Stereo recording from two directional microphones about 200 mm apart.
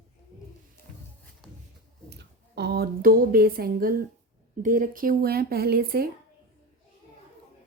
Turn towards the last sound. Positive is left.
turn(degrees=-45)  # may be behind; listen again after turning